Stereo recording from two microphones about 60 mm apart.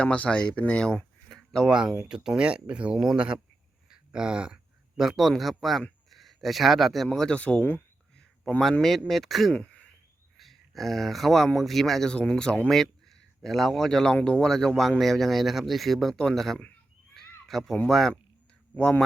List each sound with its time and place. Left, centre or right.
0.0 s speech: centre
1.3 s a sound: centre
1.6 s a man's voice: centre
7.3 s speech: left
8.4 s speech: centre
9.0 s speech: centre
9.5 s a sound: centre
10.3 s speech: centre
12.6 s speech: centre
18.7 s speech: centre